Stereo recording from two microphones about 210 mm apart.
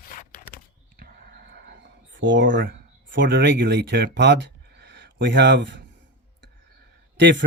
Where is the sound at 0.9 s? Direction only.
45° right (ahead or behind).